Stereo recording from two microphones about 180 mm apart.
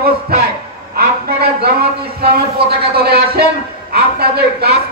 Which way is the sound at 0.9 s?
60° right (ahead or behind).